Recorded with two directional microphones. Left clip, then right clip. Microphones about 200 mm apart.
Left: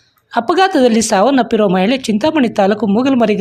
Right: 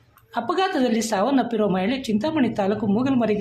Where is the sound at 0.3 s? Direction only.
40° left (ahead or behind).